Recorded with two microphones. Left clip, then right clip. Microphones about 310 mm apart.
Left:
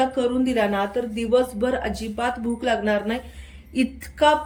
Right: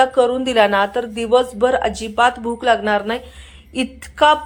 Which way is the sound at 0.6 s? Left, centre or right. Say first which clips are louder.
Right 10 dB; right.